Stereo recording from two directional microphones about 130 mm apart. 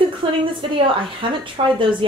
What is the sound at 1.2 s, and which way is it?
Speech, 40° right (ahead or behind).